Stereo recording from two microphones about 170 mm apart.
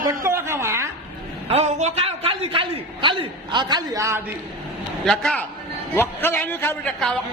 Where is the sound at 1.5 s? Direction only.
40° right (ahead or behind); by 4.2 s 20° right (ahead or behind).